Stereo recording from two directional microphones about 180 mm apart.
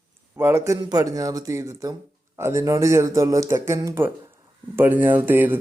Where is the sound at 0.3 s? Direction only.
15° right (ahead or behind).